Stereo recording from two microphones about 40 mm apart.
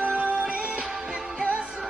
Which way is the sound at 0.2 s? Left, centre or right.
Right.